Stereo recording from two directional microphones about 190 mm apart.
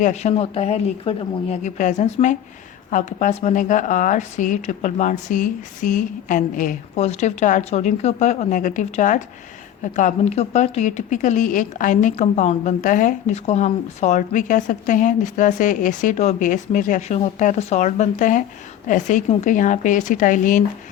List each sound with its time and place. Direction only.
0.0 s speech: 35° left (ahead or behind)